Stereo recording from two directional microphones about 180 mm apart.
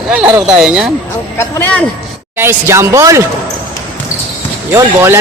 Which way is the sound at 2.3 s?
15° right (ahead or behind).